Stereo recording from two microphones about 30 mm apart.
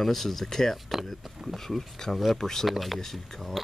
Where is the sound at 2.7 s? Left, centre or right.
Centre.